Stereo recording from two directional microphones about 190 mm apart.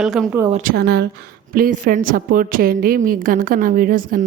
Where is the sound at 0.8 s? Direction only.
60° right (ahead or behind).